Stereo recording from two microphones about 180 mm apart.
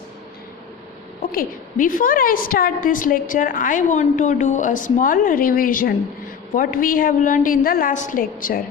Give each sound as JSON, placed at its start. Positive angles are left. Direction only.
{"t": 1.2, "sound": "a woman's voice", "side_deg": 55}